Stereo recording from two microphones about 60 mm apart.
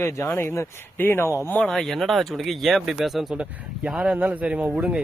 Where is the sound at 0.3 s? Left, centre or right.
Left.